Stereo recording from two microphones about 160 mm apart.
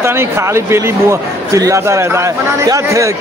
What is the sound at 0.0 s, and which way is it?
Speech, 15° right (ahead or behind).